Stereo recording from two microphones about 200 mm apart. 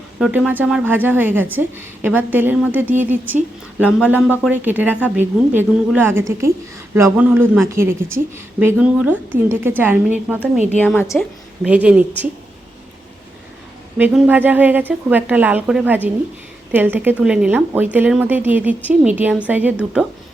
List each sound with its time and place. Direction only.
0.2 s a woman's voice: 5° right (ahead or behind)
10.8 s a woman's voice: 10° left (ahead or behind)
11.2 s a woman's voice: 5° right (ahead or behind)
14.0 s a woman's voice: 5° right (ahead or behind)